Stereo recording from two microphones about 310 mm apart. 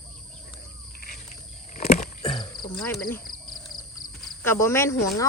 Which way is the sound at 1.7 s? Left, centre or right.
Left.